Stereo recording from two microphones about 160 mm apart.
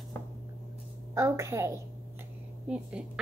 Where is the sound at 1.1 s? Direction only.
20° right (ahead or behind).